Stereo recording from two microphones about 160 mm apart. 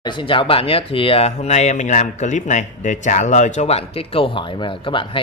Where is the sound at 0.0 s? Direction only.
30° left (ahead or behind).